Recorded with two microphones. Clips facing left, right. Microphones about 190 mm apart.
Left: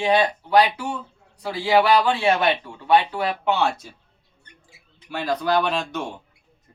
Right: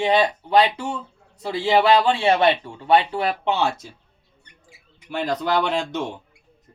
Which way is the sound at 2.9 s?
25° right (ahead or behind).